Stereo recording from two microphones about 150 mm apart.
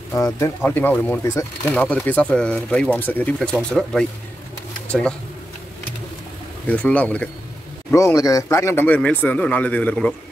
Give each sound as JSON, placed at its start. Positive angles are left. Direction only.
{"t": 0.1, "sound": "speech", "side_deg": 20}
{"t": 6.7, "sound": "speech", "side_deg": 10}
{"t": 7.9, "sound": "speech", "side_deg": 20}